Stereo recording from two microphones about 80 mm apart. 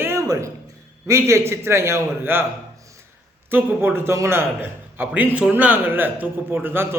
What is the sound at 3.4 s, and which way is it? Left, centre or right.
A man's voice, right.